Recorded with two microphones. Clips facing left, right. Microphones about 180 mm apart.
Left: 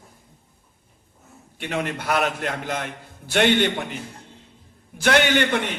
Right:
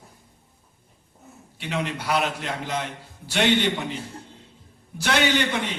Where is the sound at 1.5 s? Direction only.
50° left (ahead or behind).